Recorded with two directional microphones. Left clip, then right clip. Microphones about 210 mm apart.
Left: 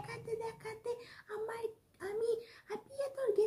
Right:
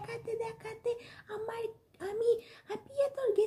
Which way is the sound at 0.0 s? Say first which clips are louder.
Right 4 dB; 20° right (ahead or behind).